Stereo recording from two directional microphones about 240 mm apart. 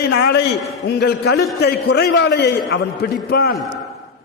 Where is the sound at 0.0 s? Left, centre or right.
Left.